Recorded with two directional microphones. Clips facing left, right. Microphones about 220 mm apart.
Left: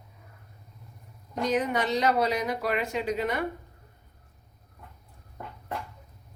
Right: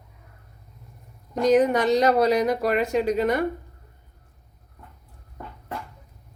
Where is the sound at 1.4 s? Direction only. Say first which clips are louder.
Right 8 dB; 40° right (ahead or behind).